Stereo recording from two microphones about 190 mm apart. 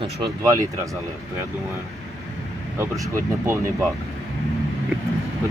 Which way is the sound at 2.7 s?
15° right (ahead or behind).